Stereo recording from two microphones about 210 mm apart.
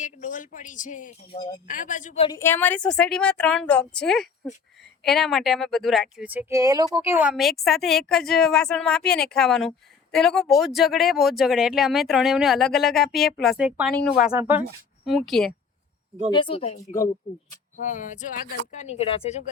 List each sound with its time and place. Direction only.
0.0 s speech: 35° left (ahead or behind)
1.3 s speech: 20° left (ahead or behind)
1.6 s speech: 40° left (ahead or behind)
2.2 s speech: 15° left (ahead or behind); by 13.9 s 5° right (ahead or behind)
13.9 s speech: 5° left (ahead or behind)
14.3 s speech: 10° right (ahead or behind)
16.3 s speech: 25° left (ahead or behind)